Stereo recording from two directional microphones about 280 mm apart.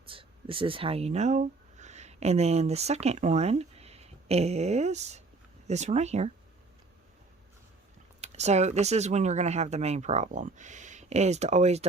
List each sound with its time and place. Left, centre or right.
0.1 s speech: centre
8.2 s speech: right